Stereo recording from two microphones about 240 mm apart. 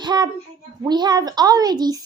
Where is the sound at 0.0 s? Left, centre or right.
Centre.